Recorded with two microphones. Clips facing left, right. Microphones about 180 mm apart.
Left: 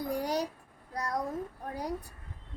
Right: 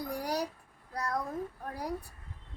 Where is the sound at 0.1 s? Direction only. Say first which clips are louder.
Left 3 dB; 20° left (ahead or behind).